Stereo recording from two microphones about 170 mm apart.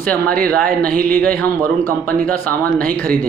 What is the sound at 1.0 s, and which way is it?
Speech, 10° left (ahead or behind).